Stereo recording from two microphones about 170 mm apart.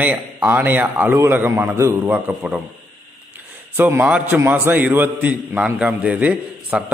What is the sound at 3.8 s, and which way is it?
A man's voice, 10° right (ahead or behind).